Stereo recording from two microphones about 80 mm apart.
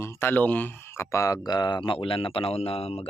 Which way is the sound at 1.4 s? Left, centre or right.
Left.